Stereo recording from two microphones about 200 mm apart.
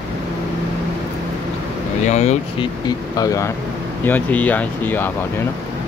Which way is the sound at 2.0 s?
35° left (ahead or behind).